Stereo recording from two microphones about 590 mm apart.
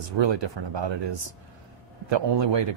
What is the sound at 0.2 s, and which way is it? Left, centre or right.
Speech, right.